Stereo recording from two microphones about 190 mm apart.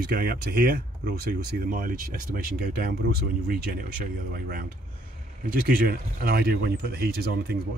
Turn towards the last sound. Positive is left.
turn(degrees=-55)  # may be behind; listen again after turning